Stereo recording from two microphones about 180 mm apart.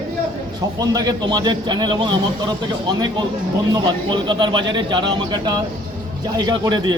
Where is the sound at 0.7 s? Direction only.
20° right (ahead or behind).